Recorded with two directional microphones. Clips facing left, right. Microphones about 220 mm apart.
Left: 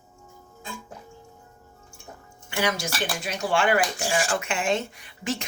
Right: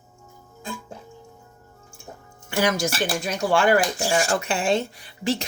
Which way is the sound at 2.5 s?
40° right (ahead or behind).